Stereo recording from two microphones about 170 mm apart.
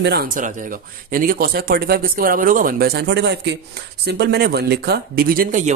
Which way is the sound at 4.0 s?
80° right.